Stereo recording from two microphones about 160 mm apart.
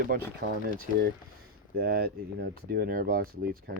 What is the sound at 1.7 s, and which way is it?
Speech, 75° right (ahead or behind).